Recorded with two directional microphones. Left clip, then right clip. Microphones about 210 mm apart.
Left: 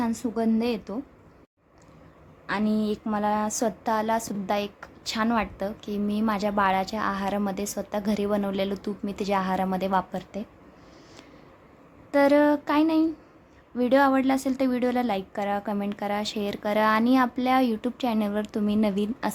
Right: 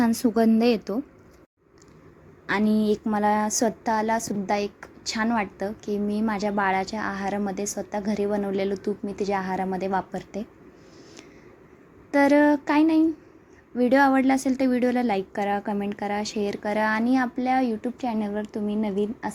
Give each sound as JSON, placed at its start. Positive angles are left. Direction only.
{"t": 0.0, "sound": "a woman's voice", "side_deg": -20}
{"t": 2.5, "sound": "speech", "side_deg": -15}
{"t": 12.1, "sound": "a sound", "side_deg": -5}
{"t": 13.7, "sound": "speech", "side_deg": -5}